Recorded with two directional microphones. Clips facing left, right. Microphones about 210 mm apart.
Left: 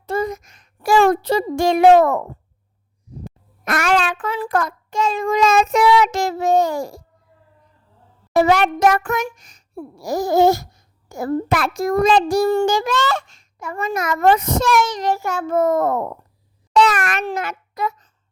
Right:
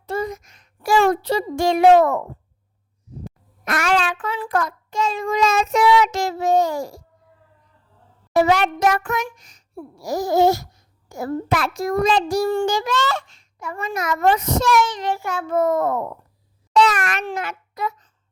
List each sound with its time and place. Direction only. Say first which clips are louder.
0.0 s speech: left 3 dB; 45° left (ahead or behind)
3.7 s a child's voice: left 2 dB; 50° left (ahead or behind)
8.3 s a child's voice: left 2 dB; 50° left (ahead or behind)
16.7 s a sound: left 1 dB; 55° left (ahead or behind)
17.2 s a child's voice: left 3 dB; 40° left (ahead or behind)